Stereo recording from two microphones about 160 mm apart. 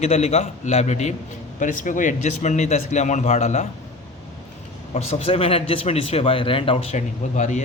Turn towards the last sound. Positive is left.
turn(degrees=50)  # may be behind; listen again after turning